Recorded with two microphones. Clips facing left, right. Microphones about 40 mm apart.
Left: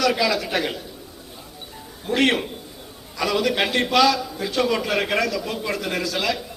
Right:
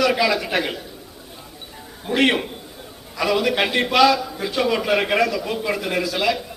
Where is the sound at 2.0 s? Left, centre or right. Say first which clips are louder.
Right 1 dB; centre.